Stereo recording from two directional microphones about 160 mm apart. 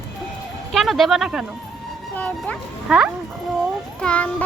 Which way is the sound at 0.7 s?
Centre (ahead or behind).